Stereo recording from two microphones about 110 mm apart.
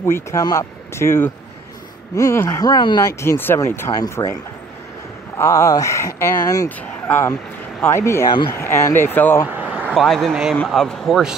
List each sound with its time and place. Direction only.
0.0 s speech: 25° left (ahead or behind)
0.4 s speech: 35° left (ahead or behind)
0.9 s speech: 20° left (ahead or behind); by 3.0 s 40° left (ahead or behind)
3.0 s speech: 25° left (ahead or behind)
5.4 s speech: 30° left (ahead or behind)
9.5 s vehicle: 10° right (ahead or behind)
9.9 s speech: centre (ahead or behind)